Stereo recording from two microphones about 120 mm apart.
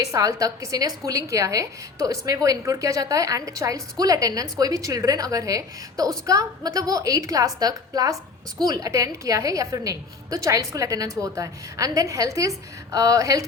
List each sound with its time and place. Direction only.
0.0 s a woman's voice: 25° right (ahead or behind)